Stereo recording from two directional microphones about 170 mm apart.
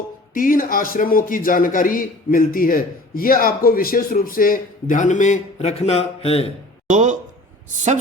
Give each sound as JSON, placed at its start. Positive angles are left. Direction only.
{"t": 0.3, "sound": "a man's voice", "side_deg": 55}
{"t": 6.8, "sound": "speech", "side_deg": -45}